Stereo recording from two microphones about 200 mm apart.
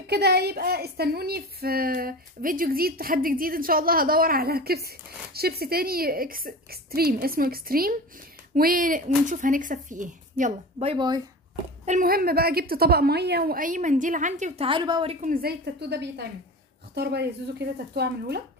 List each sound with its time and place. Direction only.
0.0 s a woman's voice: 55° right (ahead or behind); by 11.1 s 25° right (ahead or behind)
11.8 s a woman's voice: 40° right (ahead or behind); by 15.1 s 25° right (ahead or behind)
15.2 s speech: 50° right (ahead or behind)